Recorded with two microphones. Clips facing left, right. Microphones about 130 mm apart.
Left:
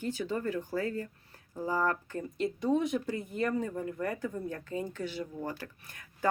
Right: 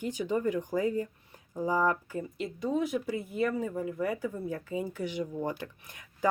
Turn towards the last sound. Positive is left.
turn(degrees=-20)  # may be behind; listen again after turning